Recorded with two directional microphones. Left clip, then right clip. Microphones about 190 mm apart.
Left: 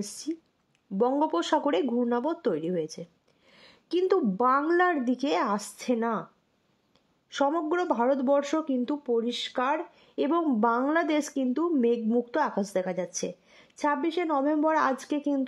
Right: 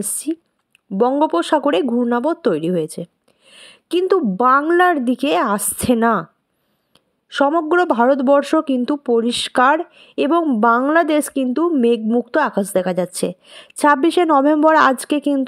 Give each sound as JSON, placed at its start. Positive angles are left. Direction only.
{"t": 0.9, "sound": "speech", "side_deg": -25}
{"t": 7.2, "sound": "speech", "side_deg": -25}